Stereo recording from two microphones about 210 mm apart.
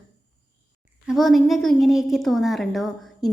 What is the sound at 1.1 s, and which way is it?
A woman's voice, centre (ahead or behind).